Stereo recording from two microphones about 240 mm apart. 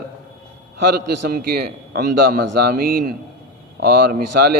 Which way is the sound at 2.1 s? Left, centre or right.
Right.